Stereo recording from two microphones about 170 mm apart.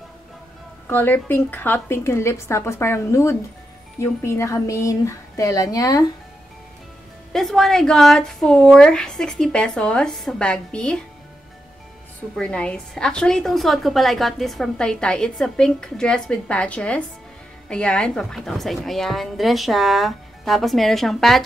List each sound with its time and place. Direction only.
0.8 s speech: 10° left (ahead or behind)
7.3 s a woman's voice: centre (ahead or behind)
12.4 s a woman's voice: 5° left (ahead or behind)